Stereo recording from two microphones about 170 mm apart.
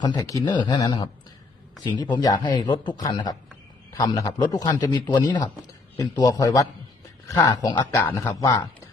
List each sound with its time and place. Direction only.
0.0 s a man's voice: 25° left (ahead or behind)